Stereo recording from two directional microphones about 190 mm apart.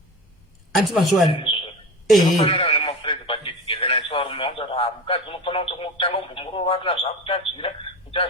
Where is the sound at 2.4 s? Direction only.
30° left (ahead or behind).